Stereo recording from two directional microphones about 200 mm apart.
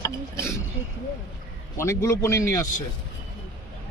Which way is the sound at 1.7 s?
15° left (ahead or behind).